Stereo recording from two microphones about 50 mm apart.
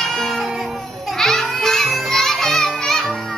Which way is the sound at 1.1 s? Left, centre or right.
Centre.